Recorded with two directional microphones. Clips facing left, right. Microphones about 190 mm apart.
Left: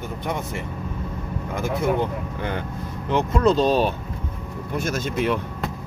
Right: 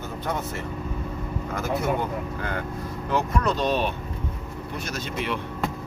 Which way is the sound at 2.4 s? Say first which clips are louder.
Left 2 dB; 20° left (ahead or behind).